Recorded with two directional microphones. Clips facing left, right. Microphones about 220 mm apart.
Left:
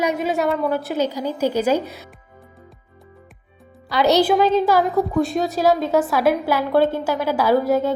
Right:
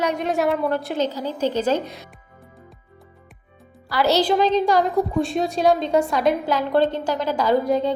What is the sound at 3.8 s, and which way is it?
A woman's voice, 20° left (ahead or behind).